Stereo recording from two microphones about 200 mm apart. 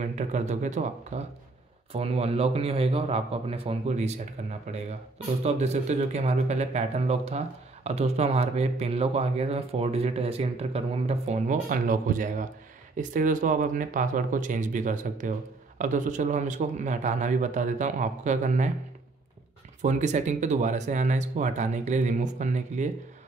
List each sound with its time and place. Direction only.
0.0 s speech: 35° right (ahead or behind)
19.8 s speech: 35° right (ahead or behind)